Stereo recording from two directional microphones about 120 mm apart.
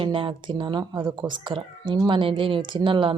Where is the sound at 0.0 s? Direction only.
45° right (ahead or behind).